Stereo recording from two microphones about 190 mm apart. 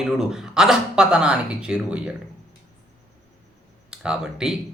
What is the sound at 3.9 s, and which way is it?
Speech, 5° right (ahead or behind).